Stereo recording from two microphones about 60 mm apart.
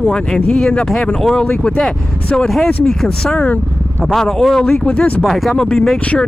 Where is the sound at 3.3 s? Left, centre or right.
Left.